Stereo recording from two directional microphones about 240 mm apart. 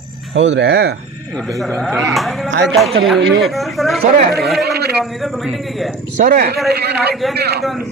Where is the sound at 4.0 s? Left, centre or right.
Right.